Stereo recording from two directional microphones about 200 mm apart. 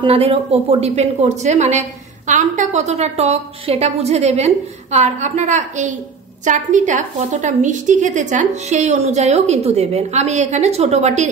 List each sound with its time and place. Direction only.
0.0 s a woman's voice: 30° right (ahead or behind)